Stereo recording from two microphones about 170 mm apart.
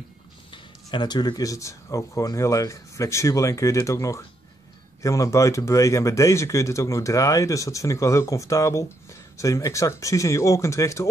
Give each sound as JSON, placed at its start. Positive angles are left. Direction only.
{"t": 0.5, "sound": "speech", "side_deg": 25}